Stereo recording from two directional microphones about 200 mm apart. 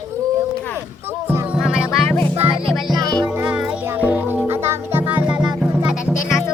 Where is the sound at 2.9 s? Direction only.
20° right (ahead or behind).